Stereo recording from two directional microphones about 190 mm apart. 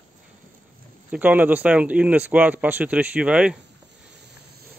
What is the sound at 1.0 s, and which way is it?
Speech, 10° right (ahead or behind).